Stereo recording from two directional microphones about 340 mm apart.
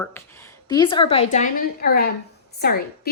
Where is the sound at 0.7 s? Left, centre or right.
Centre.